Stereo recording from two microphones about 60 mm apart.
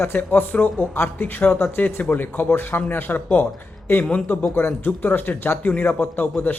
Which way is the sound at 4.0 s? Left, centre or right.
Centre.